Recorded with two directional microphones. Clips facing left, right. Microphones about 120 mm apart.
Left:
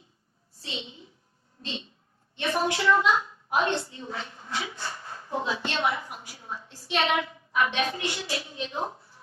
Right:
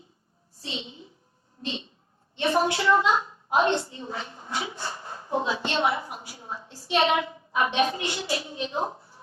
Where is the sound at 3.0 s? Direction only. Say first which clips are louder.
Right 1 dB; 25° right (ahead or behind).